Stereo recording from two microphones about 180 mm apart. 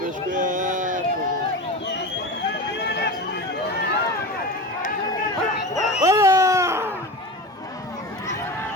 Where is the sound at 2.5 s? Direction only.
70° left (ahead or behind).